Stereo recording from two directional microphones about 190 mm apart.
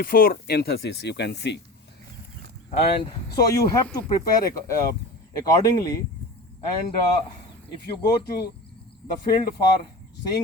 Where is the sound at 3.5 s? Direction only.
15° left (ahead or behind).